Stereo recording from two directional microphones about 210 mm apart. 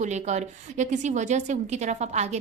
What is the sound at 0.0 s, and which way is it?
A woman's voice, 35° right (ahead or behind).